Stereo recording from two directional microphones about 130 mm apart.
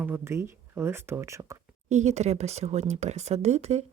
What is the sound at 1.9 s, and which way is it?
Speech, 60° right (ahead or behind).